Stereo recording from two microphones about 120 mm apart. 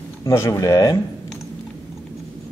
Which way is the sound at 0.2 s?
25° left (ahead or behind).